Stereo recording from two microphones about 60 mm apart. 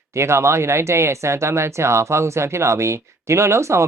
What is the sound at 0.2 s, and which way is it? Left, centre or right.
Speech, right.